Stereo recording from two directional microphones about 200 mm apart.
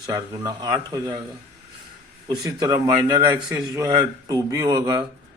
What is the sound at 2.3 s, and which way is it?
Speech, 20° right (ahead or behind).